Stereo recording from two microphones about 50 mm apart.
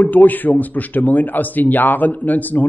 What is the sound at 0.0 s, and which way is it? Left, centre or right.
Speech, left.